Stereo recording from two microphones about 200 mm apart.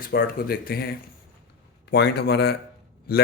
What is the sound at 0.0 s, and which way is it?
A man's voice, 45° left (ahead or behind).